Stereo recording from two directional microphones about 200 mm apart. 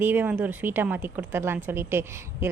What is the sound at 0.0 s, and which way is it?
Speech, 10° right (ahead or behind).